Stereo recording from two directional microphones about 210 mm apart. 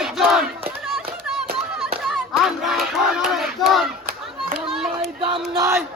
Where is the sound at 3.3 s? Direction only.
Centre (ahead or behind).